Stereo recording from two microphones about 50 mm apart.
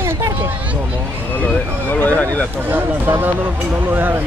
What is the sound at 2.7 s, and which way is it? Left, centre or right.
Speech, right.